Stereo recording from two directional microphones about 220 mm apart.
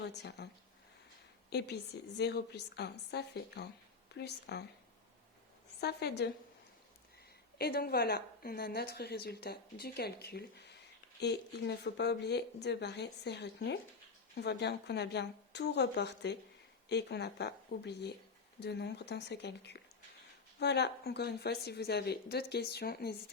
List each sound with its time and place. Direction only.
0.1 s a woman's voice: 50° left (ahead or behind)
1.5 s a woman's voice: 50° left (ahead or behind)
5.8 s a woman's voice: 45° left (ahead or behind)
7.6 s a woman's voice: 45° left (ahead or behind)